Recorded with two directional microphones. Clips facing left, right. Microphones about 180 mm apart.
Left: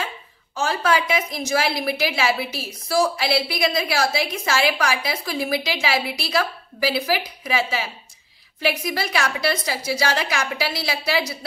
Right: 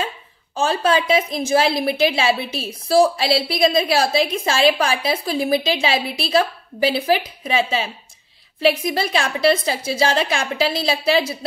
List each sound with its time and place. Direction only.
0.6 s a woman's voice: 30° right (ahead or behind)